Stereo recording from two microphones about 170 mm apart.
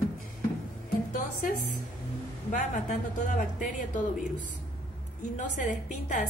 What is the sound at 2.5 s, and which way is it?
Speech, 50° left (ahead or behind).